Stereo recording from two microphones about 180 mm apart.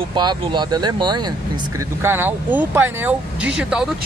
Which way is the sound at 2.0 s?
10° right (ahead or behind).